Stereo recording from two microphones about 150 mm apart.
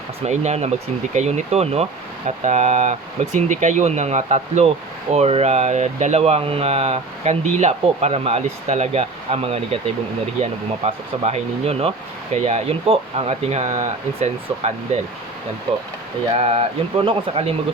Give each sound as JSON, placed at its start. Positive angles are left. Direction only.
{"t": 0.2, "sound": "speech", "side_deg": -45}
{"t": 16.4, "sound": "speech", "side_deg": -45}